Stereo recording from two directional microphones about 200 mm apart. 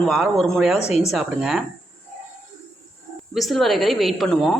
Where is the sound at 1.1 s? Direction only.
Centre (ahead or behind).